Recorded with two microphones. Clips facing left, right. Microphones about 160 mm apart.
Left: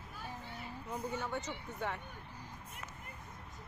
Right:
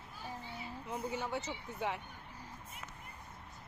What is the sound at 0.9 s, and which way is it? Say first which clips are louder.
Speech: right 1 dB; 5° right (ahead or behind).